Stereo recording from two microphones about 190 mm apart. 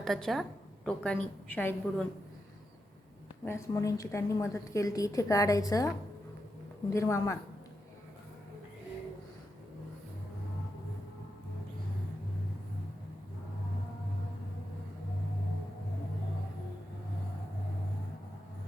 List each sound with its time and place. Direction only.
0.0 s a woman's voice: centre (ahead or behind)
3.4 s a woman's voice: 15° left (ahead or behind)
6.9 s a woman's voice: 15° left (ahead or behind)